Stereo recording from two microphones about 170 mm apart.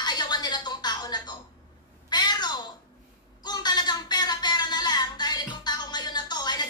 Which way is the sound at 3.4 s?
25° left (ahead or behind).